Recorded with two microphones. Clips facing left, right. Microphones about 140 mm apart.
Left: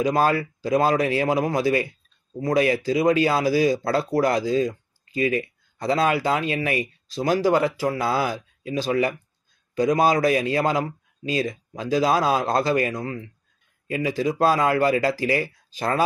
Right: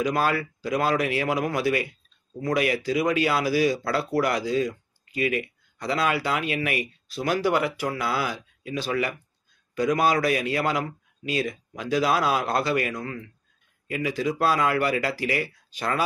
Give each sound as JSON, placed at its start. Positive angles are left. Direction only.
{"t": 0.0, "sound": "speech", "side_deg": 30}